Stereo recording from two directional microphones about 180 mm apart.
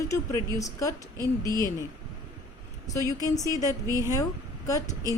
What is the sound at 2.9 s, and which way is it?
A woman's voice, 20° left (ahead or behind).